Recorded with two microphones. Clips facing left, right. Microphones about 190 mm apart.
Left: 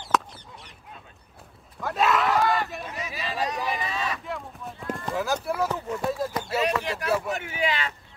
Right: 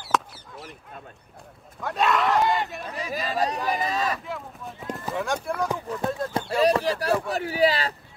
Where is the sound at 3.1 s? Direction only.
40° right (ahead or behind).